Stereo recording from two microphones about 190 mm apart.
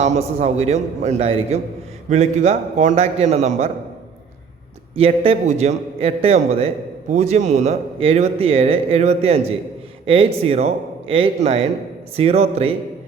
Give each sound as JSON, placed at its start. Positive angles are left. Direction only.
{"t": 0.0, "sound": "speech", "side_deg": -35}
{"t": 4.9, "sound": "speech", "side_deg": -30}